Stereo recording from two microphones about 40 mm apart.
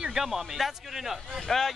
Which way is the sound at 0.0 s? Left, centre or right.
Centre.